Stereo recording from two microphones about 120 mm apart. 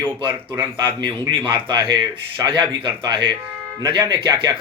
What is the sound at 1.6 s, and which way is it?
A man's voice, 45° right (ahead or behind).